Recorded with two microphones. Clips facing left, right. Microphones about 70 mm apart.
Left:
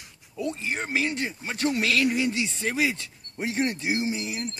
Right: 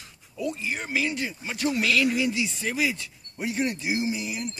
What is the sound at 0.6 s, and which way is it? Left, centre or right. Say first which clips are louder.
Speech: left 2 dB; left.